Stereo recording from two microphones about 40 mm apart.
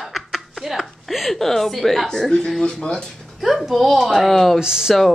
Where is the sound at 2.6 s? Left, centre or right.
Centre.